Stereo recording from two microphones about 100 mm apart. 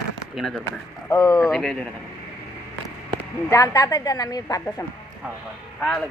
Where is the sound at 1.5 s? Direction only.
5° left (ahead or behind).